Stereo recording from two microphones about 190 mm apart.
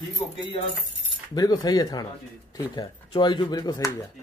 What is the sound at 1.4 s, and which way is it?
Speech, 20° left (ahead or behind).